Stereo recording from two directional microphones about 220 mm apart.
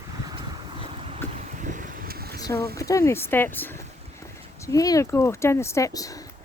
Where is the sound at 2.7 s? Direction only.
15° left (ahead or behind).